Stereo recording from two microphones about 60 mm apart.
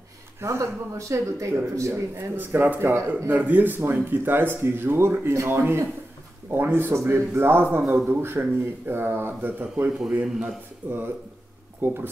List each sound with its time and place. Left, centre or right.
0.4 s speech: right
2.1 s speech: right
2.8 s speech: right
3.3 s speech: right
9.8 s a man's voice: centre
10.8 s speech: right